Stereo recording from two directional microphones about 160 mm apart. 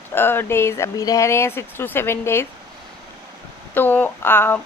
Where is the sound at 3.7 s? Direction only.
10° left (ahead or behind).